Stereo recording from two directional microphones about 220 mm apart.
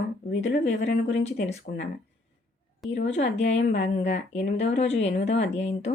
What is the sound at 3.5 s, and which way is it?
Speech, 55° left (ahead or behind).